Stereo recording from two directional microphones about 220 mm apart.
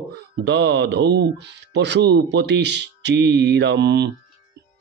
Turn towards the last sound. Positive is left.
turn(degrees=-50)  # may be behind; listen again after turning